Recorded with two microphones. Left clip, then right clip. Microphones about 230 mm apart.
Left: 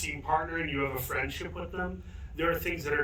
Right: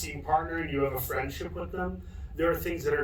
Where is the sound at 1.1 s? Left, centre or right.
Centre.